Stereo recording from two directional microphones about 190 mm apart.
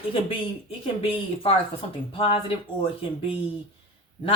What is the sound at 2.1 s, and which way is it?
Speech, 30° left (ahead or behind).